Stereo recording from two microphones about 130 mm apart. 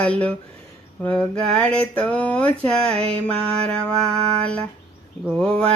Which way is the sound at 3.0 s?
50° right (ahead or behind).